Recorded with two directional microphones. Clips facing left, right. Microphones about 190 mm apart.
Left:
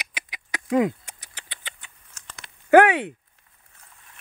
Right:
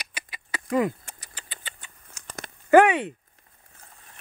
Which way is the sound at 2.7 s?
10° left (ahead or behind).